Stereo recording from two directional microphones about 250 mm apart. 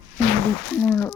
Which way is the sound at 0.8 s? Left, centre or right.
Centre.